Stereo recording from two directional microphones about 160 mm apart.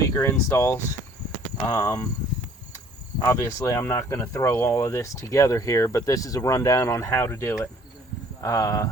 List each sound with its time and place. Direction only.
0.0 s speech: 15° left (ahead or behind)
3.2 s speech: 20° left (ahead or behind)